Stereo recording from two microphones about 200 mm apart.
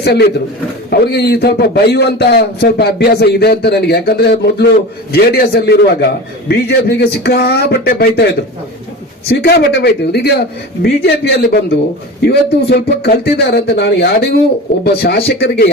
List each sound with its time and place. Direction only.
0.0 s a man's voice: 55° left (ahead or behind)
9.3 s a man's voice: 55° left (ahead or behind)